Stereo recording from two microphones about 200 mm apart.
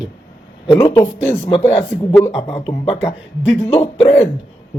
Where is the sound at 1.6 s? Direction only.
15° left (ahead or behind).